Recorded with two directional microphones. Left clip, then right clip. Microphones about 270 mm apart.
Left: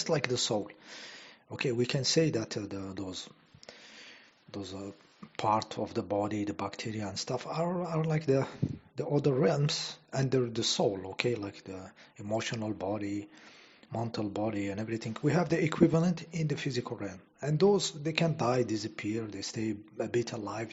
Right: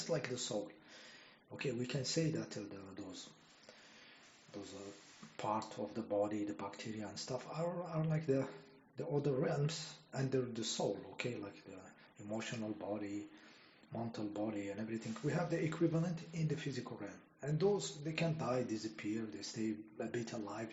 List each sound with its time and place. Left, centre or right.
0.1 s speech: left
5.4 s speech: left